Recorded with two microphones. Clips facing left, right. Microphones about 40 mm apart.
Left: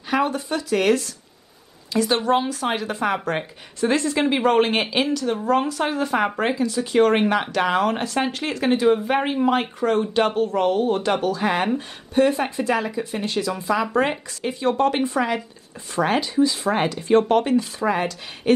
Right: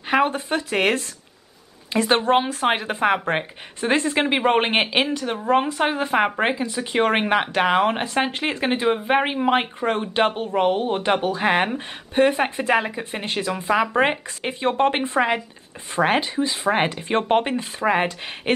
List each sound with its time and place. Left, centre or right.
0.1 s speech: right
11.4 s speech: right